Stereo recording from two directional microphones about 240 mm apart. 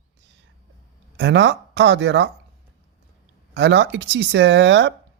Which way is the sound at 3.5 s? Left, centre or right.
Right.